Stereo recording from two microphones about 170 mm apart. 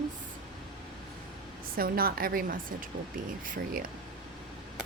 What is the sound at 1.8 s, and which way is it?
Speech, 60° right (ahead or behind).